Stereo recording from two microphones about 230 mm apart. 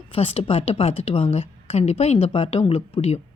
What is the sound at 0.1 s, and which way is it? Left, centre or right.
A woman's voice, left.